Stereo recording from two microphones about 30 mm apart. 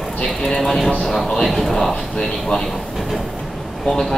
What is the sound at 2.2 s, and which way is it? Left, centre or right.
Speech, left.